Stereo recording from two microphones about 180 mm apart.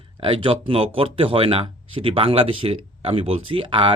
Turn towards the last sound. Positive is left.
turn(degrees=-30)  # may be behind; listen again after turning